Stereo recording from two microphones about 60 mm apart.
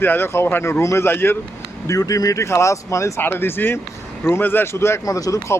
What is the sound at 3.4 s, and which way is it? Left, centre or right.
Speech, left.